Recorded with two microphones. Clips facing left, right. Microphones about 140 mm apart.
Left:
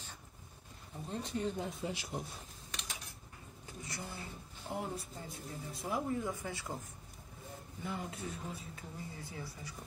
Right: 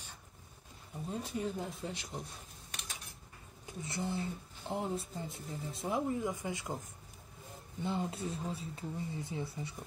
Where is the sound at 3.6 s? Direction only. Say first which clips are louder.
Right 7 dB; 25° right (ahead or behind).